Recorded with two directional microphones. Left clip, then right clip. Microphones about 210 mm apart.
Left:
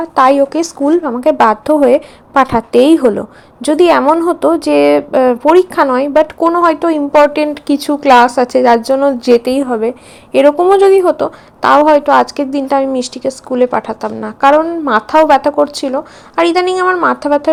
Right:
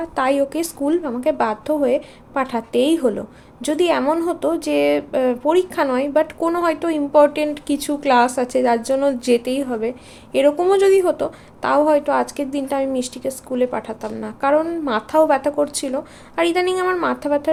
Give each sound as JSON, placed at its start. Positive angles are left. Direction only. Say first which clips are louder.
{"t": 0.0, "sound": "a woman's voice", "louder": "left 10 dB", "side_deg": 15}